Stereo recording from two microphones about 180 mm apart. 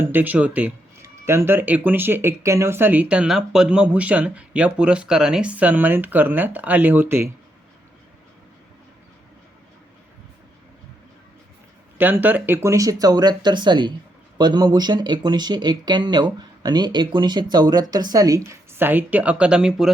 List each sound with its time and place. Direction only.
0.0 s speech: 10° right (ahead or behind)
11.9 s speech: 10° right (ahead or behind)